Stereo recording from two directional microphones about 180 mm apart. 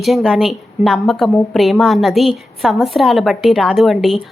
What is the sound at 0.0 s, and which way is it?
A woman's voice, centre (ahead or behind).